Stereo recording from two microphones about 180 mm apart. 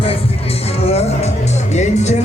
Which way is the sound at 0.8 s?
35° left (ahead or behind).